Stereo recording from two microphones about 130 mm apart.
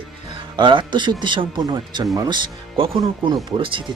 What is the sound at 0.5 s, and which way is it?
Speech, 35° right (ahead or behind).